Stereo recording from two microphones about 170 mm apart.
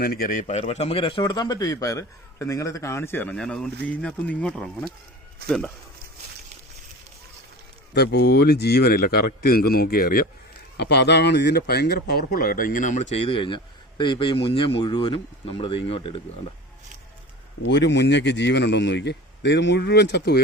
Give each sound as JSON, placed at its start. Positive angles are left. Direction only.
{"t": 0.0, "sound": "a man's voice", "side_deg": 60}
{"t": 7.9, "sound": "speech", "side_deg": 75}
{"t": 10.8, "sound": "speech", "side_deg": 90}
{"t": 17.7, "sound": "a man's voice", "side_deg": 90}